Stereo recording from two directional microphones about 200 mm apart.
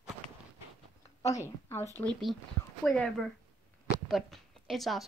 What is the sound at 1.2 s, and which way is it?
A woman's voice, 15° left (ahead or behind).